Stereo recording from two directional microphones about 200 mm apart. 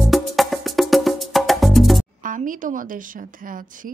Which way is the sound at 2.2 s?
40° right (ahead or behind).